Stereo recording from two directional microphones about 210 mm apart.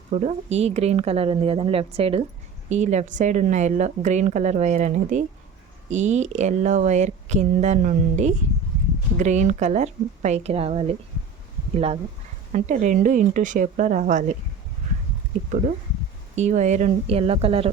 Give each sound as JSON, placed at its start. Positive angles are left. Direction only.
{"t": 0.1, "sound": "a woman's voice", "side_deg": -35}
{"t": 12.5, "sound": "a woman's voice", "side_deg": -35}
{"t": 16.3, "sound": "a woman's voice", "side_deg": -35}